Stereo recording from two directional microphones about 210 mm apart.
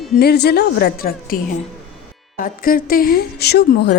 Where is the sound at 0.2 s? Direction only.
50° left (ahead or behind).